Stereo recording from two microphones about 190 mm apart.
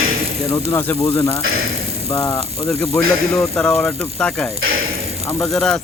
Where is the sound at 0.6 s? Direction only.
15° left (ahead or behind).